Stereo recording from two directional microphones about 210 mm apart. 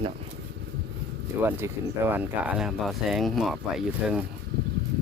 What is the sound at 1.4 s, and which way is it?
Speech, 10° right (ahead or behind).